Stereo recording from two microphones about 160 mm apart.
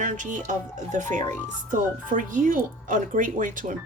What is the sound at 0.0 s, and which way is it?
Speech, 50° right (ahead or behind).